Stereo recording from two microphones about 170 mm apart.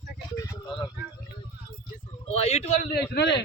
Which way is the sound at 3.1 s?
75° left (ahead or behind).